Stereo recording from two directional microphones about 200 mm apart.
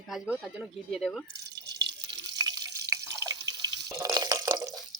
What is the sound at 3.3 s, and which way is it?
Drip, 20° right (ahead or behind).